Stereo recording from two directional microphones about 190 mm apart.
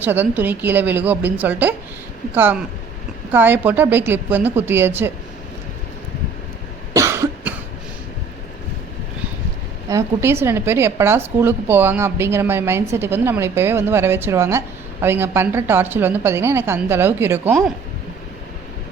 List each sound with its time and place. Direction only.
0.0 s a woman's voice: 10° right (ahead or behind)
6.9 s cough: 15° right (ahead or behind)
9.9 s a woman's voice: 15° right (ahead or behind)